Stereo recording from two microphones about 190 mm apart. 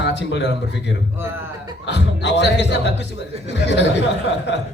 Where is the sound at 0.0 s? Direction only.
65° left (ahead or behind).